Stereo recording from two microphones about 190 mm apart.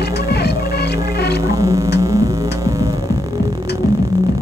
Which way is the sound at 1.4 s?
15° right (ahead or behind).